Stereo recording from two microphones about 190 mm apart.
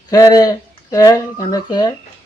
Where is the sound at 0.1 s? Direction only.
20° left (ahead or behind).